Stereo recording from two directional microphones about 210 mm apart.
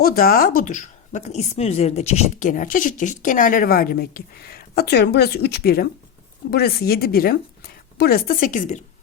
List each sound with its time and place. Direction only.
0.0 s a woman's voice: 45° left (ahead or behind)